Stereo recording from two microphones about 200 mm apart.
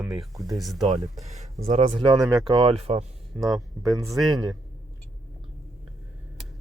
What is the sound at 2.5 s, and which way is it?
Speech, 30° right (ahead or behind).